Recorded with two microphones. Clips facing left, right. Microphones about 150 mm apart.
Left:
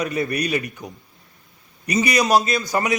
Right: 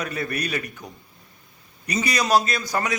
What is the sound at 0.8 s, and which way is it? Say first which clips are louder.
Speech: left 4 dB; centre (ahead or behind).